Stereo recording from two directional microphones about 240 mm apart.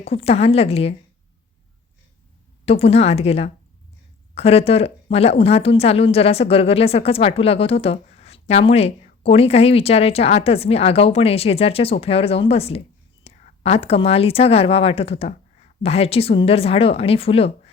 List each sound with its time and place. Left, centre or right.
0.0 s a woman's voice: left
2.6 s a woman's voice: left